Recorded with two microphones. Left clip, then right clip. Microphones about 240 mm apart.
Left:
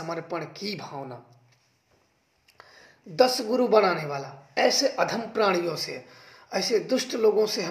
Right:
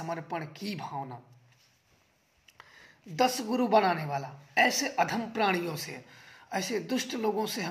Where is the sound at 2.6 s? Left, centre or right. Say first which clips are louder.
Left 3 dB; right.